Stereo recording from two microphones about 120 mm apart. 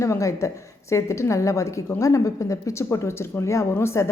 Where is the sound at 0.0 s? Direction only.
25° left (ahead or behind).